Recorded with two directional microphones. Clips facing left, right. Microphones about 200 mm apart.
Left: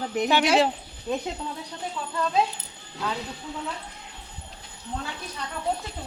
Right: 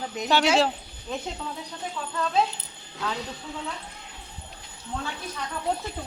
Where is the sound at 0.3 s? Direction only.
15° left (ahead or behind).